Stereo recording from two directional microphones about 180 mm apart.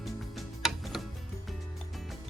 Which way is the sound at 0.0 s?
Centre (ahead or behind).